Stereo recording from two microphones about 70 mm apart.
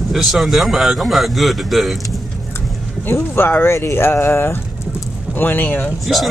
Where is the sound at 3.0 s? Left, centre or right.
Left.